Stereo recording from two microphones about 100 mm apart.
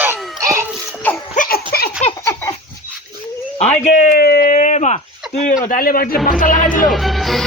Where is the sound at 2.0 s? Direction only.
90° left.